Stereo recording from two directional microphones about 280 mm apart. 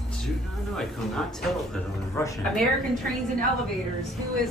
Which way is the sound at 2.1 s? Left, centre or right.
Centre.